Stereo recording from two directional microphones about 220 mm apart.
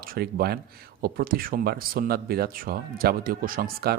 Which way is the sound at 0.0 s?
40° right (ahead or behind).